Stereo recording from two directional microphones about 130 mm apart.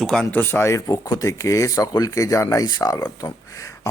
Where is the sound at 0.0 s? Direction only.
5° left (ahead or behind).